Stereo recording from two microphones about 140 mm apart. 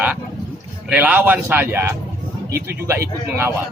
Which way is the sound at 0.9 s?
10° right (ahead or behind).